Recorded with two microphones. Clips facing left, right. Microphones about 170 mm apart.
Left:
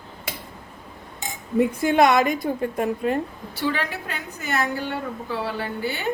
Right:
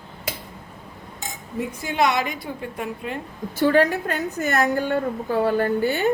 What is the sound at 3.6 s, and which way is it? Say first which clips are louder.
A woman's voice: right 8 dB; 45° right (ahead or behind).